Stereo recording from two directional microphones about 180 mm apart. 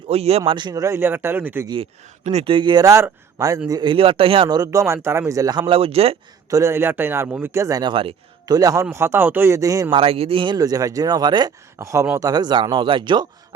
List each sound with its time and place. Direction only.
0.1 s a man's voice: 35° right (ahead or behind); by 1.6 s 10° right (ahead or behind)
1.6 s speech: 25° right (ahead or behind)
6.5 s a man's voice: 15° right (ahead or behind)
10.0 s speech: 30° right (ahead or behind)